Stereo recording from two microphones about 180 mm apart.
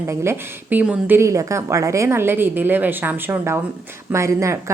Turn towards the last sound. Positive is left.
turn(degrees=-15)  # may be behind; listen again after turning